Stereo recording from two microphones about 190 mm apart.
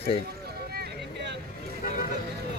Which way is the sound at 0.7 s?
60° right (ahead or behind).